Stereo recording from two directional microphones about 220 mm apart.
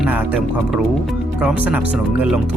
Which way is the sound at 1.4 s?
5° right (ahead or behind).